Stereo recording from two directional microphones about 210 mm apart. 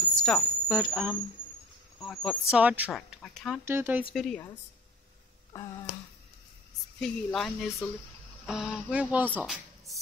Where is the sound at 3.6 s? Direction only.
10° right (ahead or behind).